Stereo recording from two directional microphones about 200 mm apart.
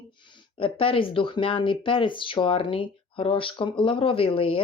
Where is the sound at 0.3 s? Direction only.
25° left (ahead or behind).